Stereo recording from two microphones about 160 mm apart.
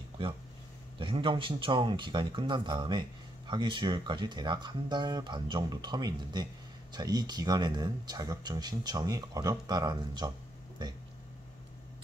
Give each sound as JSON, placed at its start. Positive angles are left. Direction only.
{"t": 0.9, "sound": "speech", "side_deg": -35}